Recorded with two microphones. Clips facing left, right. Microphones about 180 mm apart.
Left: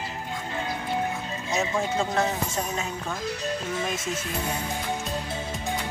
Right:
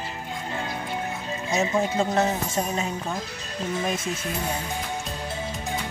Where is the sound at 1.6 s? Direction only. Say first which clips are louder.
Right 3 dB; 20° right (ahead or behind).